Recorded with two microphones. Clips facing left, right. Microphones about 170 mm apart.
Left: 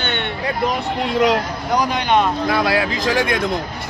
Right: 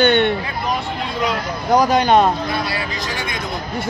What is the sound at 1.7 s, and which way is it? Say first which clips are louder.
Speech: right 4 dB; 40° right (ahead or behind).